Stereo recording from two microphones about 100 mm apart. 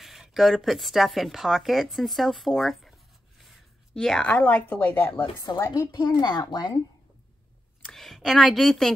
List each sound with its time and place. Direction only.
0.0 s speech: 5° right (ahead or behind); by 5.2 s 20° left (ahead or behind)
5.5 s speech: 45° left (ahead or behind)
7.8 s a woman's voice: 5° left (ahead or behind)